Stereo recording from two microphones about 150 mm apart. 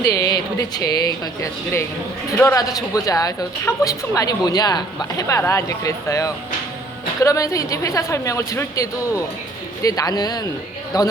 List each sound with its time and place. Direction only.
0.0 s a woman's voice: 25° left (ahead or behind)